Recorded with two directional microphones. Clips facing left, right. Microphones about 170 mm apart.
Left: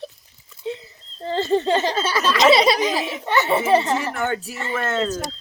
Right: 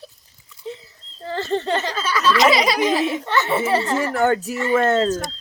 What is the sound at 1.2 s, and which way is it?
Speech, 20° left (ahead or behind).